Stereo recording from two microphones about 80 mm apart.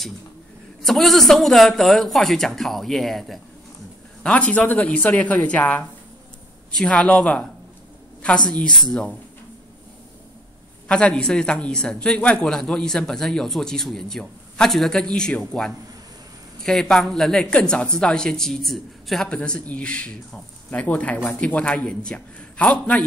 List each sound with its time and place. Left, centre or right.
0.8 s speech: centre
4.2 s a man's voice: centre
10.9 s a man's voice: centre
19.2 s a man's voice: centre